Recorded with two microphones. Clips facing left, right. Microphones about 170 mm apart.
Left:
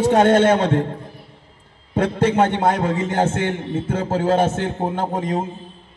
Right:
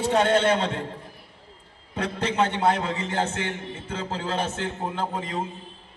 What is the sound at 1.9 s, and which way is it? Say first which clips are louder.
A man's voice: left 9 dB; 50° left (ahead or behind).